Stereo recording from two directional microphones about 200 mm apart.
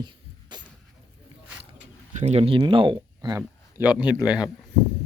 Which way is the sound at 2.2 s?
30° right (ahead or behind).